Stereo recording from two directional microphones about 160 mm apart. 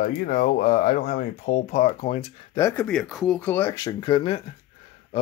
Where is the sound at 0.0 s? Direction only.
60° left (ahead or behind).